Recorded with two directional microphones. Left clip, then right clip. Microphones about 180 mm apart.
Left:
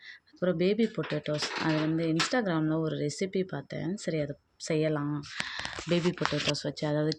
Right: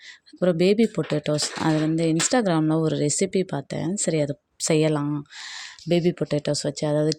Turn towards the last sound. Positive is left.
turn(degrees=-40)  # may be behind; listen again after turning